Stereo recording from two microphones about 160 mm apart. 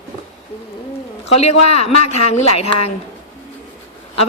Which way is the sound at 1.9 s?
40° left (ahead or behind).